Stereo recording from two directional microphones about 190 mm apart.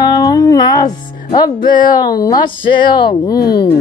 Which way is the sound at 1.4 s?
25° left (ahead or behind).